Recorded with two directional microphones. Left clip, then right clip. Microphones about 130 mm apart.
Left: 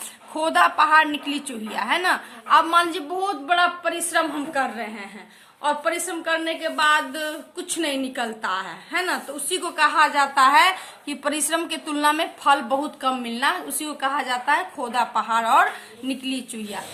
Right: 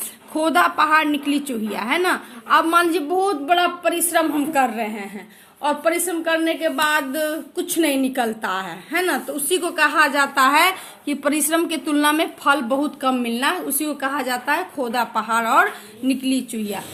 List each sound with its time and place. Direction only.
0.3 s speech: 25° right (ahead or behind); by 5.0 s 55° right (ahead or behind)
5.6 s a woman's voice: 40° right (ahead or behind)